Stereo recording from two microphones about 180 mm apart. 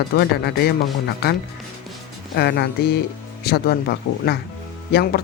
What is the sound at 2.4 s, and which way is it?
Speech, 65° left (ahead or behind).